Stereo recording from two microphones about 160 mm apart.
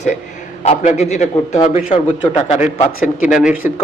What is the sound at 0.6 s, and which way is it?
A man's voice, 45° left (ahead or behind).